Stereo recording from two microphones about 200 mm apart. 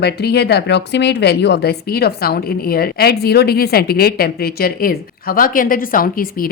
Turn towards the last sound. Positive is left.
turn(degrees=45)  # may be behind; listen again after turning